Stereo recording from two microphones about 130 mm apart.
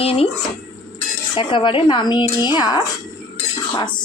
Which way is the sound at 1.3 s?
40° left (ahead or behind).